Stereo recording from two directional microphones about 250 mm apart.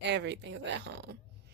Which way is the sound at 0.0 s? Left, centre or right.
Right.